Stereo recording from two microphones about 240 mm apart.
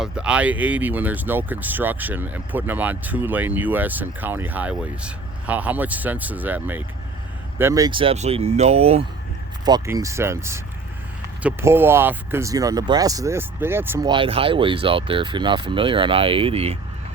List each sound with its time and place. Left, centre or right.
0.0 s speech: centre; by 9.0 s right
9.6 s speech: centre